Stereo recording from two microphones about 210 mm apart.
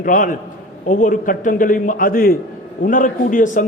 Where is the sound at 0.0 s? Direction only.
40° left (ahead or behind).